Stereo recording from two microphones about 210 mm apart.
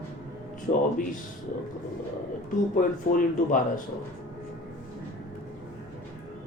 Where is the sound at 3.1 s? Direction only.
40° left (ahead or behind).